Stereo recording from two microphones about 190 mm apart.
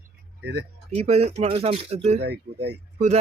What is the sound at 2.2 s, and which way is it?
Speech, 60° right (ahead or behind).